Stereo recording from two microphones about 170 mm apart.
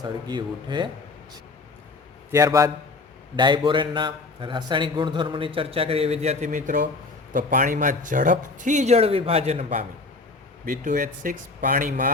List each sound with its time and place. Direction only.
0.0 s a man's voice: 25° right (ahead or behind)
2.3 s a man's voice: 20° right (ahead or behind); by 12.1 s 50° right (ahead or behind)